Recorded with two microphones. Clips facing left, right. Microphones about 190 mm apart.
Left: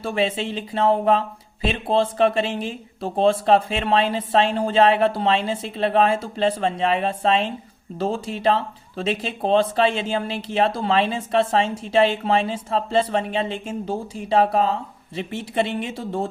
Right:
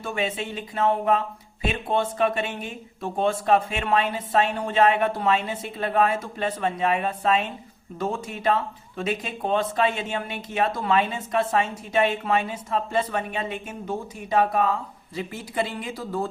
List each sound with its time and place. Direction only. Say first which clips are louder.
0.0 s speech: left 5 dB; 30° left (ahead or behind)